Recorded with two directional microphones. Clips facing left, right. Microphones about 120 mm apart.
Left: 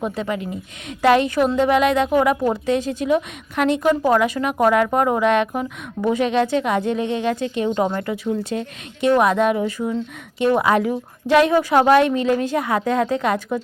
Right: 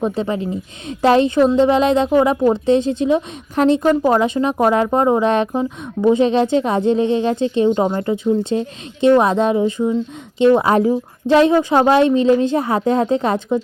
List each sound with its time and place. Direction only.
0.0 s a woman's voice: 30° right (ahead or behind)